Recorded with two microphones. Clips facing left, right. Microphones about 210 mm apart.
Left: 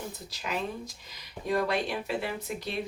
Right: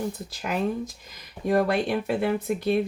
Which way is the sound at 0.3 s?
50° right (ahead or behind).